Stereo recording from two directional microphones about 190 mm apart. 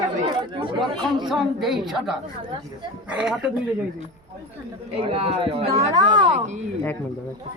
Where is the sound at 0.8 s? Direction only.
Centre (ahead or behind).